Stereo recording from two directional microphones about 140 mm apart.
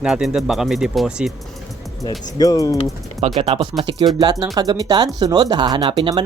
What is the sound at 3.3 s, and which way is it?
Speech, 40° right (ahead or behind).